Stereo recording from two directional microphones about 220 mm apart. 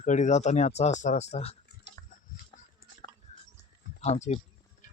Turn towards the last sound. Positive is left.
turn(degrees=30)  # may be behind; listen again after turning